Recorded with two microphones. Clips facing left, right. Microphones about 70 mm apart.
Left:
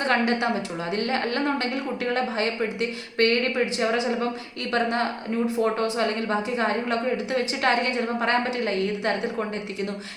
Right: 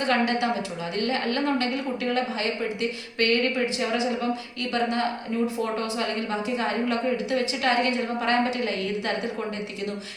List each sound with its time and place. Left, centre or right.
0.0 s a woman's voice: left
6.6 s a woman's voice: left